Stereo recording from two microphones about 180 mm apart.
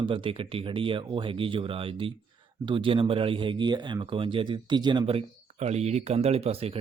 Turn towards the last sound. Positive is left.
turn(degrees=-35)  # may be behind; listen again after turning